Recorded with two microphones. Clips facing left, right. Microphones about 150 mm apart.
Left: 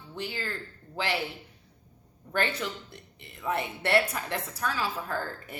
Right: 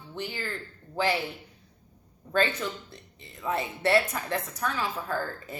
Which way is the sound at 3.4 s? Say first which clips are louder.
Right 2 dB; 15° right (ahead or behind).